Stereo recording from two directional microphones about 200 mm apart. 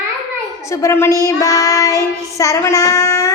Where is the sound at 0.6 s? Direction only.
15° left (ahead or behind).